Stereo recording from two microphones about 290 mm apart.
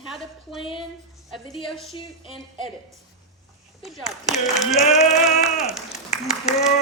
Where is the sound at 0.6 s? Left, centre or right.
Centre.